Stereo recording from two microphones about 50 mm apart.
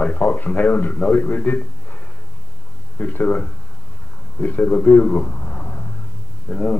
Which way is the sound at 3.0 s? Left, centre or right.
Left.